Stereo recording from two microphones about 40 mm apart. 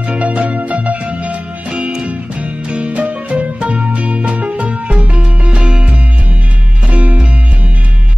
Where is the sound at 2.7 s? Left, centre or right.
Right.